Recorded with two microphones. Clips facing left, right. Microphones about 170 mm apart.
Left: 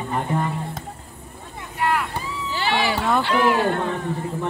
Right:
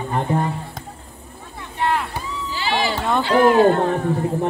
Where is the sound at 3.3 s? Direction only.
45° right (ahead or behind).